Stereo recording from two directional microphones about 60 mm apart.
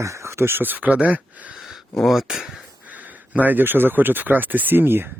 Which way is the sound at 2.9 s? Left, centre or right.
Right.